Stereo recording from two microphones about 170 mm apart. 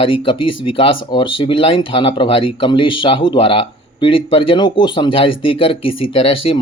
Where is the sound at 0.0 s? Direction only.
30° left (ahead or behind).